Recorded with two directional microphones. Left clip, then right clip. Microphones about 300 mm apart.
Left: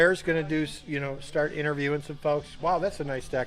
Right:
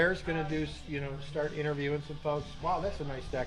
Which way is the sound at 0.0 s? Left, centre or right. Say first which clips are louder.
Left 7 dB; left.